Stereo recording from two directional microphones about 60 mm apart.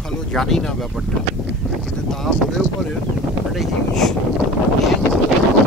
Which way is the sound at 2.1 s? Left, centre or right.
Centre.